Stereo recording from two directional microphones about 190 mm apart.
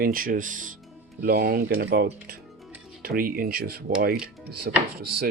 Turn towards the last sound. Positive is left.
turn(degrees=-55)  # may be behind; listen again after turning